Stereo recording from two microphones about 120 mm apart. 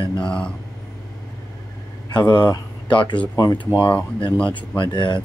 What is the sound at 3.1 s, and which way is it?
Speech, 10° left (ahead or behind).